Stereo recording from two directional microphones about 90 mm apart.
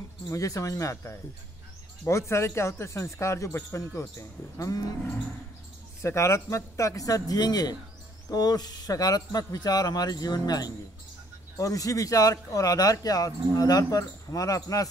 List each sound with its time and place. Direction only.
0.3 s speech: 40° left (ahead or behind)
6.0 s speech: 30° left (ahead or behind)